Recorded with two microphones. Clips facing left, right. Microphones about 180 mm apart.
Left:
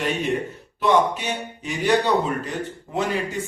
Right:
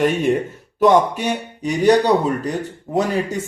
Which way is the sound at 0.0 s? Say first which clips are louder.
Right 7 dB; 50° right (ahead or behind).